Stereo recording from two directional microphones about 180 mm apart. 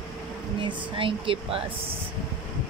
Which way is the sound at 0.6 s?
30° right (ahead or behind).